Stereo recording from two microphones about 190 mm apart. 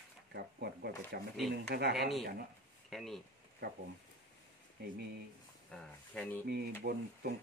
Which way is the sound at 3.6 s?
60° right (ahead or behind).